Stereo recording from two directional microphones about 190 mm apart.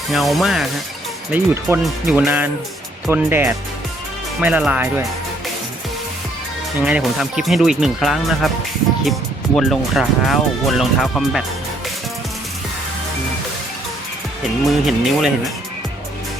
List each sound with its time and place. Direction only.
0.1 s speech: centre (ahead or behind)
6.8 s speech: 5° right (ahead or behind)
9.6 s speech: centre (ahead or behind)
14.7 s speech: centre (ahead or behind)